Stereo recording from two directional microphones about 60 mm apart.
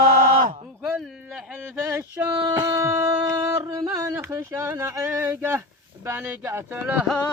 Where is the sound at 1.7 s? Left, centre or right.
Right.